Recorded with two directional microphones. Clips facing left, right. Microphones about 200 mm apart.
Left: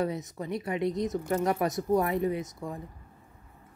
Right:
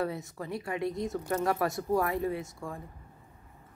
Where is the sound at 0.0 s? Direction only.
20° left (ahead or behind).